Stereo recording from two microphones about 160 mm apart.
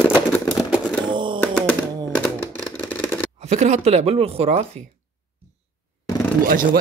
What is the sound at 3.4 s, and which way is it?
Speech, 45° right (ahead or behind).